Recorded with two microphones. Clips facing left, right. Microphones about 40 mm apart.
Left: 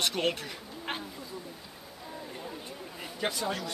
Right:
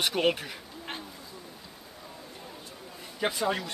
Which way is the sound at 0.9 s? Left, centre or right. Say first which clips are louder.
Left 3 dB; centre.